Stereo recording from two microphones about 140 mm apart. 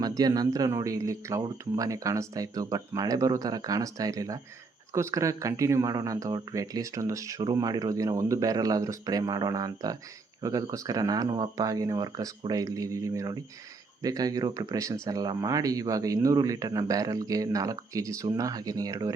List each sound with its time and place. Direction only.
0.0 s speech: 25° right (ahead or behind)